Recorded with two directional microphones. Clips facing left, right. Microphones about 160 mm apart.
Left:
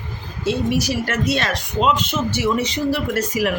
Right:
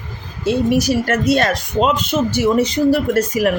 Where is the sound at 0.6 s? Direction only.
45° right (ahead or behind).